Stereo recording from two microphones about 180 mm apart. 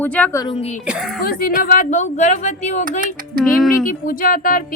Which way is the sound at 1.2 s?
55° left (ahead or behind).